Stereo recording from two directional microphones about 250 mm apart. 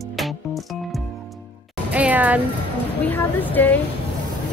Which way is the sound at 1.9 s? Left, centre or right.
Centre.